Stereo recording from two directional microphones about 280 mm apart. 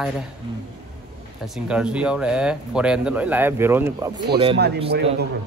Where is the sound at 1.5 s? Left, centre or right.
Centre.